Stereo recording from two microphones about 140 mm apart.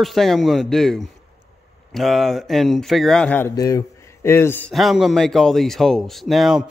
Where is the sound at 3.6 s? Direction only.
25° left (ahead or behind).